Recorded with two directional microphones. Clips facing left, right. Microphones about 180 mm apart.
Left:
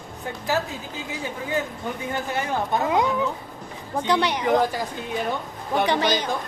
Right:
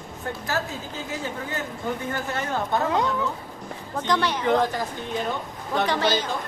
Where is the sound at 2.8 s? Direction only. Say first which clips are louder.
Left 2 dB; 15° left (ahead or behind).